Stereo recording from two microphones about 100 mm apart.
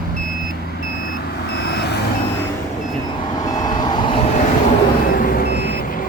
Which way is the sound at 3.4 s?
40° left (ahead or behind).